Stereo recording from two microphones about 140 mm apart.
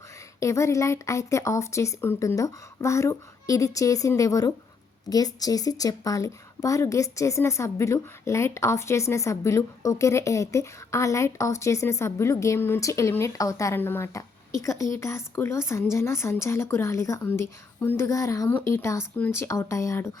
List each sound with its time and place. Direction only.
0.3 s a woman's voice: 20° left (ahead or behind)